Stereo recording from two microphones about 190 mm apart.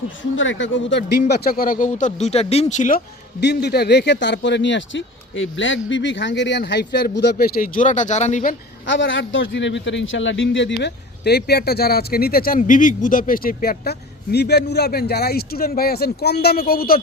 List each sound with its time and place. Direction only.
0.2 s speech: 80° left
1.3 s speech: 50° left (ahead or behind)
3.4 s a man's voice: 60° left (ahead or behind); by 8.5 s 40° left (ahead or behind)
8.9 s a man's voice: 75° left (ahead or behind); by 17.0 s 50° left (ahead or behind)